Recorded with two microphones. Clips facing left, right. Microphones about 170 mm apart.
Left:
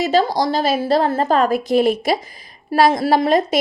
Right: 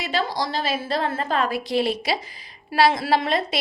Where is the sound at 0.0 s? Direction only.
40° left (ahead or behind).